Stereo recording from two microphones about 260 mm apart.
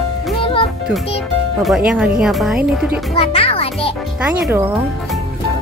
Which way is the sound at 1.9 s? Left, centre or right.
Centre.